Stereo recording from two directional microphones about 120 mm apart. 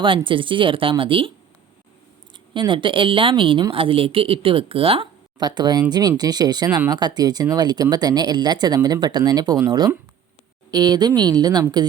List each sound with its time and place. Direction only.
0.0 s a woman's voice: 45° right (ahead or behind)
2.5 s a woman's voice: 40° right (ahead or behind)
5.4 s speech: 35° right (ahead or behind)
6.7 s speech: 10° right (ahead or behind)
6.9 s speech: 35° right (ahead or behind)